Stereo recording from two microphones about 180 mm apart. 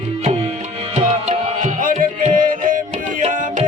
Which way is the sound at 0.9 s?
45° right (ahead or behind).